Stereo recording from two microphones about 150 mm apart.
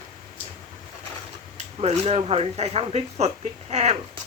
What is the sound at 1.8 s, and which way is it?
Speech, 45° right (ahead or behind).